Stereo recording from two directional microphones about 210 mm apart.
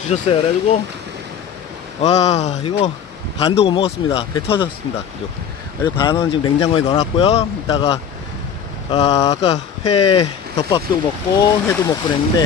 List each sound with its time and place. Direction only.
0.1 s speech: 30° left (ahead or behind)
2.0 s speech: 30° left (ahead or behind)
5.8 s speech: 25° left (ahead or behind)